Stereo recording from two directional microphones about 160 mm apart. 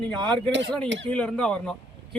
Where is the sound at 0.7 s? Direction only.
5° left (ahead or behind).